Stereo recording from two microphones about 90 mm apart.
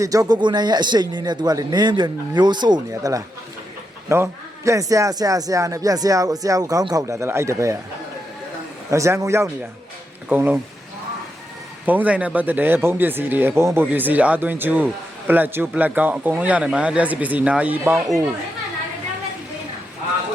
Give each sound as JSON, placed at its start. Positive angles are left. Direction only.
{"t": 0.0, "sound": "a man's voice", "side_deg": -40}
{"t": 0.3, "sound": "a man's voice", "side_deg": -55}
{"t": 4.1, "sound": "a man's voice", "side_deg": -30}
{"t": 8.9, "sound": "a man's voice", "side_deg": -35}
{"t": 10.2, "sound": "speech", "side_deg": -20}
{"t": 11.9, "sound": "speech", "side_deg": -15}